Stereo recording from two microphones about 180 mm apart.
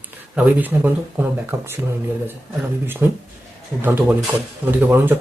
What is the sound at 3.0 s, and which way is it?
Speech, 10° right (ahead or behind).